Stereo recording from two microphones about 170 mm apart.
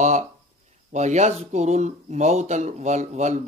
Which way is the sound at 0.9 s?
45° right (ahead or behind).